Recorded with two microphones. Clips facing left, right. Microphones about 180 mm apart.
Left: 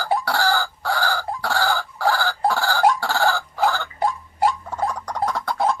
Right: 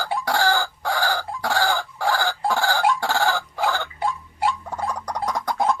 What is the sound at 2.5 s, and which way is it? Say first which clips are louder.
Fowl: even; 20° right (ahead or behind).